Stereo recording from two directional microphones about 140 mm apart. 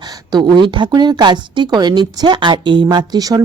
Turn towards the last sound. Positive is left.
turn(degrees=-25)  # may be behind; listen again after turning